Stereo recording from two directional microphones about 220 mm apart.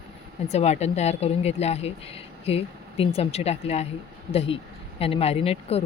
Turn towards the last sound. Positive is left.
turn(degrees=25)  # may be behind; listen again after turning